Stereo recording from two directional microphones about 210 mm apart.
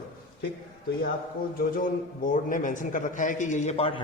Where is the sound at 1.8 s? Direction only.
40° left (ahead or behind).